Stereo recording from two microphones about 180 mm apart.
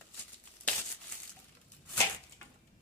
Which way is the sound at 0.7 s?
5° left (ahead or behind).